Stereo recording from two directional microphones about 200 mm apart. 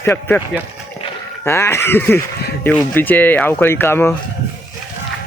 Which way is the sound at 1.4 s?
10° left (ahead or behind).